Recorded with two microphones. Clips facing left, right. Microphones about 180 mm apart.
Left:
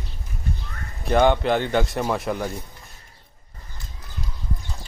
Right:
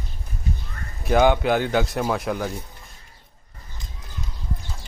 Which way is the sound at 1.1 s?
5° right (ahead or behind).